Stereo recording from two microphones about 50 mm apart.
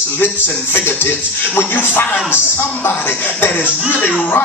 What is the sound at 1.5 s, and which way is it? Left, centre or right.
Speech, left.